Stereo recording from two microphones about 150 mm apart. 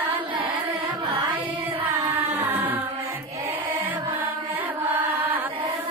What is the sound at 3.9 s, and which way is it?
Mantra, 10° right (ahead or behind).